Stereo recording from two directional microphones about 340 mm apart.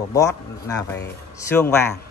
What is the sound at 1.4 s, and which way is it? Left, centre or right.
Speech, centre.